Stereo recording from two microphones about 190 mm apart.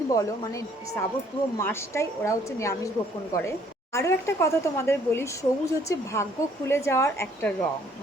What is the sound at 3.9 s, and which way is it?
A woman's voice, 15° left (ahead or behind).